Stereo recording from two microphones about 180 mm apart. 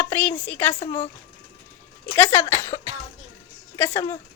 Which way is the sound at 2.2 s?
15° left (ahead or behind).